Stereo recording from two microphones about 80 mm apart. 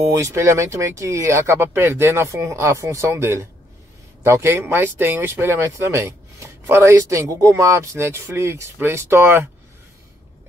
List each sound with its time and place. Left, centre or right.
0.1 s speech: right